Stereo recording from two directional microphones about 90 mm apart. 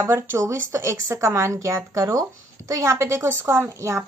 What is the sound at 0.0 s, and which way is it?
A woman's voice, 25° right (ahead or behind).